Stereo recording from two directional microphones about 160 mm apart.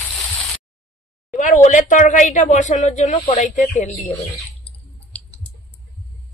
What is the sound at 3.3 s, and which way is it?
Speech, 50° left (ahead or behind).